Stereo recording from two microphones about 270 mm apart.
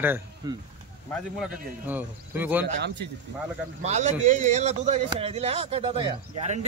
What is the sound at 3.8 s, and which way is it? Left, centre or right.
Speech, right.